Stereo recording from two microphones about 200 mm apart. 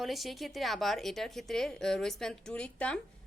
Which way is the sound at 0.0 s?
Centre (ahead or behind).